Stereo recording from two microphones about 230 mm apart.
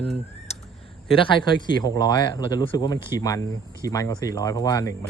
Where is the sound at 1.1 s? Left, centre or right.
Left.